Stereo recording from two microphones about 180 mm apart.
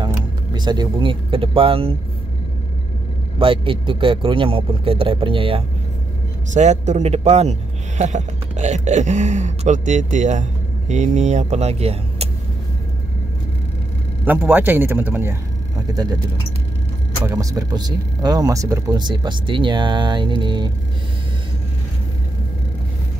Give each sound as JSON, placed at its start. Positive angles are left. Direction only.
{"t": 0.0, "sound": "speech", "side_deg": -25}
{"t": 3.3, "sound": "speech", "side_deg": -30}
{"t": 6.5, "sound": "speech", "side_deg": -40}
{"t": 14.2, "sound": "a man's voice", "side_deg": -10}
{"t": 15.9, "sound": "speech", "side_deg": -25}
{"t": 17.3, "sound": "speech", "side_deg": -20}